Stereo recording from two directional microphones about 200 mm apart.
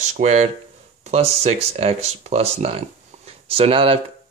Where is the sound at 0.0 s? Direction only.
35° right (ahead or behind).